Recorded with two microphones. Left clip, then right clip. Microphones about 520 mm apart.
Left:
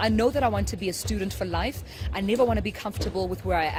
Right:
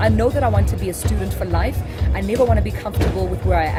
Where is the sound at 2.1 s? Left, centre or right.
Left.